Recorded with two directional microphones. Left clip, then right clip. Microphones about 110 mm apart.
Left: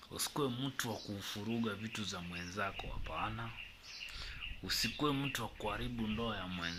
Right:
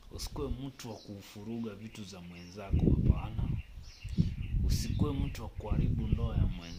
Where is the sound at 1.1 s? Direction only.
10° right (ahead or behind).